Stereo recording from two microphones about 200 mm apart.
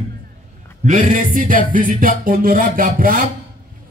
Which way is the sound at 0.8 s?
40° right (ahead or behind).